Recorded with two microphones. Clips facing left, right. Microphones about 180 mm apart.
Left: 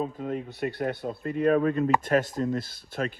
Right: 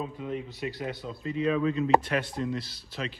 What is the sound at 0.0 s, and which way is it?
Speech, 45° left (ahead or behind).